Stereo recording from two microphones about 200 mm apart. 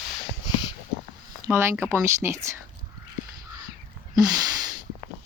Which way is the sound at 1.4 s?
10° right (ahead or behind).